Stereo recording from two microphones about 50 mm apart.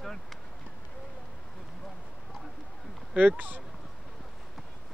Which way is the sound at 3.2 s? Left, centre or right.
Right.